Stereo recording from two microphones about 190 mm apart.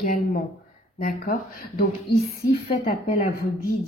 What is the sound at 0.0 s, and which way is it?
A woman's voice, 45° left (ahead or behind).